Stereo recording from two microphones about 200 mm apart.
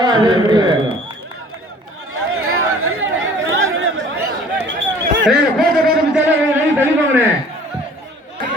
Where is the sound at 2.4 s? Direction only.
90° right.